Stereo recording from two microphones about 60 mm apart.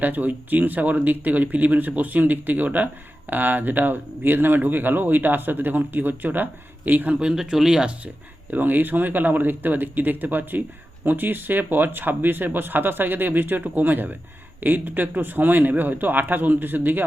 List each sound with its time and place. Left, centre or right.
0.0 s speech: right
7.2 s speech: centre
8.0 s speech: right